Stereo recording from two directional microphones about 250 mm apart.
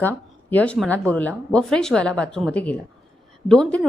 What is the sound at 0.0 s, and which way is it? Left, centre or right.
A woman's voice, centre.